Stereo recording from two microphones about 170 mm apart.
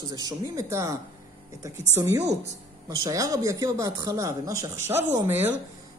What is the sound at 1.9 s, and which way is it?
Speech, 20° right (ahead or behind).